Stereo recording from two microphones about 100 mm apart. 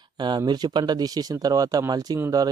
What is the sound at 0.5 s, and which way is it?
Speech, 45° right (ahead or behind).